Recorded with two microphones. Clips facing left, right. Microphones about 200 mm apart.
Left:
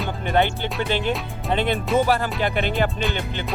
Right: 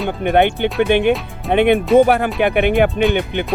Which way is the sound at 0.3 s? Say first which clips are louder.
Right 7 dB; 60° right (ahead or behind).